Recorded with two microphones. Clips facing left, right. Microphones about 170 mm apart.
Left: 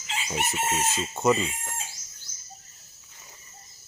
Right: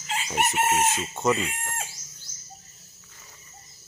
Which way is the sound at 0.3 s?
60° right (ahead or behind).